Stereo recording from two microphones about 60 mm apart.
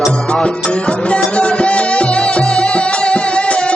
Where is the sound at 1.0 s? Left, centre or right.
Left.